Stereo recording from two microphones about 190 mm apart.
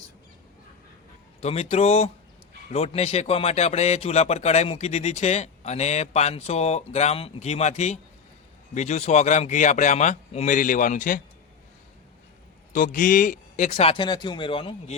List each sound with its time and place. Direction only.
1.4 s a man's voice: 35° left (ahead or behind)
12.7 s a man's voice: 45° left (ahead or behind); by 14.9 s 30° left (ahead or behind)